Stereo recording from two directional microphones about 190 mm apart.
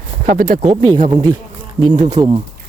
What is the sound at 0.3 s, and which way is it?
Speech, 45° right (ahead or behind).